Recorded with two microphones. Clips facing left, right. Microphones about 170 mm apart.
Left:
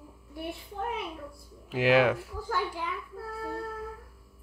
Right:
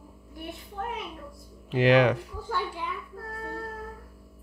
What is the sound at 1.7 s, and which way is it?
Speech, 5° left (ahead or behind).